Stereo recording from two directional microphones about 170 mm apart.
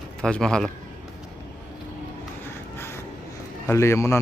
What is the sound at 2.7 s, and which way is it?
Vehicle, 15° left (ahead or behind).